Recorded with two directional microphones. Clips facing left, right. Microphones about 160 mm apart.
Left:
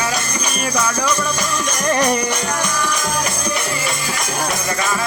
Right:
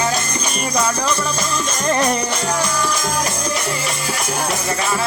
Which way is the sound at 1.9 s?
15° left (ahead or behind).